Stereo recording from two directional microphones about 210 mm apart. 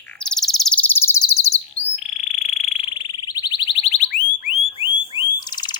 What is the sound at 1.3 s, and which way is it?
Bird, 30° left (ahead or behind).